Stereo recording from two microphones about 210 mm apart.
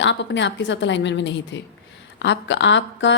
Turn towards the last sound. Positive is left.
turn(degrees=60)  # may be behind; listen again after turning